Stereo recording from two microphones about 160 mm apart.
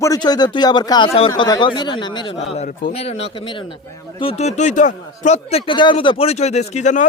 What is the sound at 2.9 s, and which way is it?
Speech, 40° left (ahead or behind).